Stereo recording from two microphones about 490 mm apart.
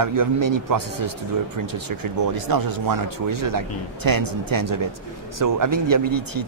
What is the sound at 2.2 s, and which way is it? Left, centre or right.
Speech, right.